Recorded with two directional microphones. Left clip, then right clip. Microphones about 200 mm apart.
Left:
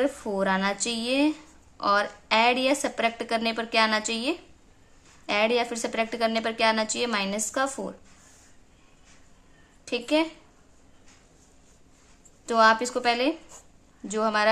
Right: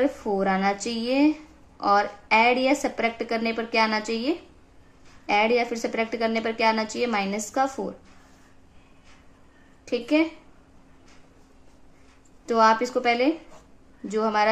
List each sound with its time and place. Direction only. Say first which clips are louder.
0.0 s a woman's voice: right 2 dB; 20° left (ahead or behind)
9.8 s a woman's voice: right 2 dB; 20° left (ahead or behind)
12.4 s a woman's voice: right 1 dB; 20° left (ahead or behind)